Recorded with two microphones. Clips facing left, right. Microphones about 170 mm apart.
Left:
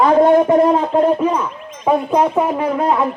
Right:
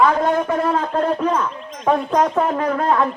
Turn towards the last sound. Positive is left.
turn(degrees=10)  # may be behind; listen again after turning